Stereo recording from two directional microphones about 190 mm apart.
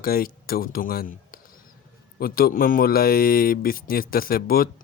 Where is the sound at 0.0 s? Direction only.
50° left (ahead or behind).